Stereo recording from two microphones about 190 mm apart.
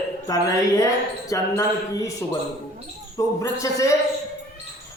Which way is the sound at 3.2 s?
15° left (ahead or behind).